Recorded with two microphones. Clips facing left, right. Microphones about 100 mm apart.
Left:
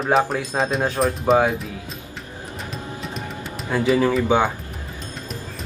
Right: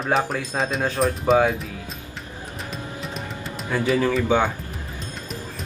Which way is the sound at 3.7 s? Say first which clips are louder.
Left 3 dB; 20° left (ahead or behind).